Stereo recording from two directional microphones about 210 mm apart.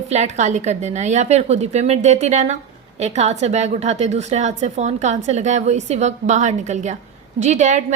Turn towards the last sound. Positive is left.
turn(degrees=-35)  # may be behind; listen again after turning